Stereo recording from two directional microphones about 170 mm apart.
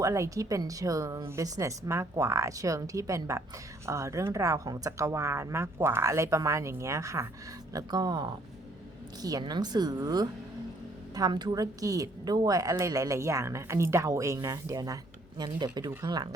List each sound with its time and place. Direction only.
0.0 s a woman's voice: 20° right (ahead or behind)